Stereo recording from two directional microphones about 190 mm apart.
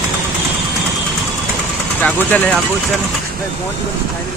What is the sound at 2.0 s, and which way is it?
Speech, 5° left (ahead or behind).